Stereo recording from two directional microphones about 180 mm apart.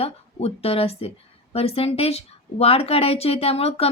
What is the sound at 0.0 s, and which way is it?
A woman's voice, 35° left (ahead or behind).